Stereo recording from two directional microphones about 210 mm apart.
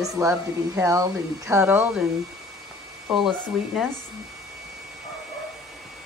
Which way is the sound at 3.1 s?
Centre (ahead or behind).